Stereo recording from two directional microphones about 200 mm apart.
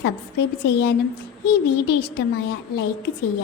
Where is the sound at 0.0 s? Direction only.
55° left (ahead or behind).